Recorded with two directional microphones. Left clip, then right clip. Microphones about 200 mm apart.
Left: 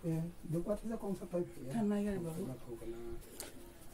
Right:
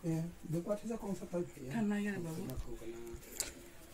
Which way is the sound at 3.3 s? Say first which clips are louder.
Right 6 dB; centre (ahead or behind).